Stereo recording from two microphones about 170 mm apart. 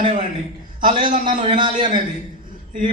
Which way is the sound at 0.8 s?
50° right (ahead or behind).